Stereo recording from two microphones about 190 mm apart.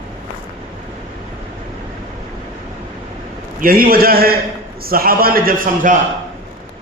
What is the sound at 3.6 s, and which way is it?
A man's voice, 50° right (ahead or behind).